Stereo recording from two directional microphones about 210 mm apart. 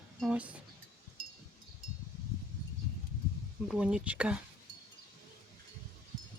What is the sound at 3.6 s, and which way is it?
Speech, 5° right (ahead or behind).